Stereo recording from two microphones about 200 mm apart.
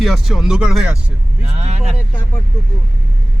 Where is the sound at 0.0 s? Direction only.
Centre (ahead or behind).